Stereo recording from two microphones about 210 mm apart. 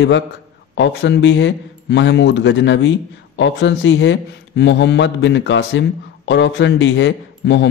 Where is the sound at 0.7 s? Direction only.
55° left (ahead or behind).